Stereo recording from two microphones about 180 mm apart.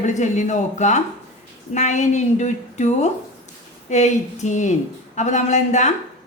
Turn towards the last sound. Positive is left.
turn(degrees=40)  # may be behind; listen again after turning